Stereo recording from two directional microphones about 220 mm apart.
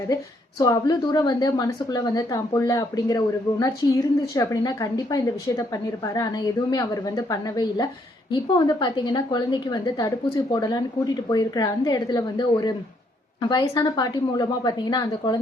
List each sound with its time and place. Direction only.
0.6 s a woman's voice: 15° left (ahead or behind)